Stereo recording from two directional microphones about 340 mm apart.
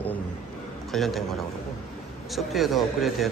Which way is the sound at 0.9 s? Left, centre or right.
Centre.